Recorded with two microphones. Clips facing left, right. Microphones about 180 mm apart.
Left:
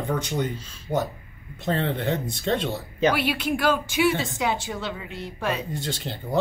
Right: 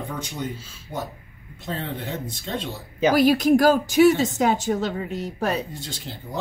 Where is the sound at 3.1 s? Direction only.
40° right (ahead or behind).